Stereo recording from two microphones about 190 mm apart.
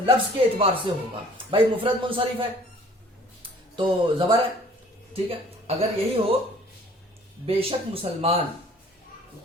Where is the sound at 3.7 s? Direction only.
25° right (ahead or behind).